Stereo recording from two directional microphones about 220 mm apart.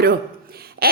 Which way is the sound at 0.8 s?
45° right (ahead or behind).